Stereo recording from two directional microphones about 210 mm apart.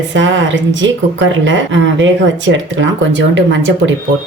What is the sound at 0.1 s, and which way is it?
Speech, 60° right (ahead or behind).